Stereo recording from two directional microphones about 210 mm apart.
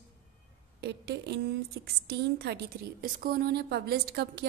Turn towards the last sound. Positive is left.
turn(degrees=-50)  # may be behind; listen again after turning